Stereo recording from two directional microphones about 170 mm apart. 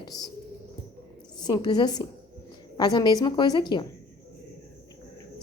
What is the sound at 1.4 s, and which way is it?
A woman's voice, 25° left (ahead or behind).